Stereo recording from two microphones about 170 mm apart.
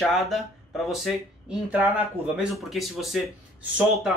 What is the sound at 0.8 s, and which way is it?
Speech, 5° right (ahead or behind).